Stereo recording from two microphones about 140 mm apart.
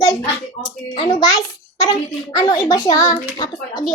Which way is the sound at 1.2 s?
25° left (ahead or behind).